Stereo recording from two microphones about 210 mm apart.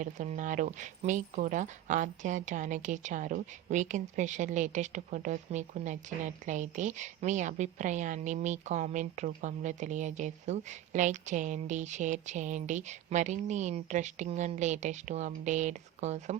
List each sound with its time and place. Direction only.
0.0 s speech: 35° right (ahead or behind)